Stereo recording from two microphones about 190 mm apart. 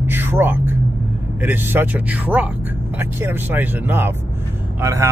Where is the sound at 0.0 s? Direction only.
10° right (ahead or behind).